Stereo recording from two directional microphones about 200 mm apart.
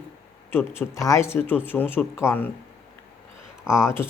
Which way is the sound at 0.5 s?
10° left (ahead or behind).